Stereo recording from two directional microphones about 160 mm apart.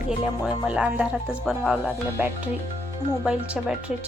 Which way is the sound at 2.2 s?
10° right (ahead or behind).